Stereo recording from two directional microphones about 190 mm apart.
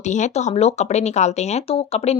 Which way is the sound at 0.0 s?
40° left (ahead or behind).